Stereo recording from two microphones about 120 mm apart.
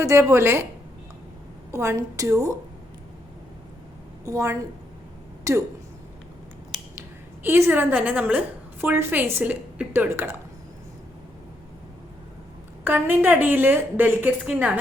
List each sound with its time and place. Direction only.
0.0 s speech: 25° right (ahead or behind)
1.7 s speech: 25° right (ahead or behind)
4.3 s speech: 25° right (ahead or behind)
7.4 s a woman's voice: 20° right (ahead or behind)
12.8 s a woman's voice: 15° right (ahead or behind)